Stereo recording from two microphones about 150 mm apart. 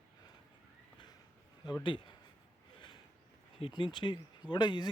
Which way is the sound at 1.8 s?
35° left (ahead or behind).